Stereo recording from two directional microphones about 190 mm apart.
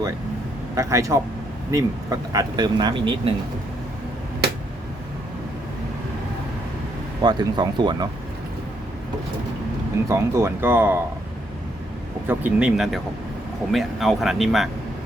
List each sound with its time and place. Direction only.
0.8 s speech: 15° right (ahead or behind)
7.2 s speech: 20° right (ahead or behind)
10.1 s speech: 15° right (ahead or behind)
12.3 s speech: 10° right (ahead or behind)